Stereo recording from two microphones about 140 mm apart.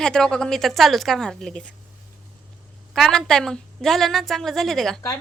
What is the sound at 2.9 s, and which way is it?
A woman's voice, centre (ahead or behind).